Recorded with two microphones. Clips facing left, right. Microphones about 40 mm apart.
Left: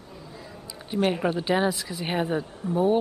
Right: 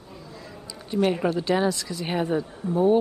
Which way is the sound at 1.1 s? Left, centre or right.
Centre.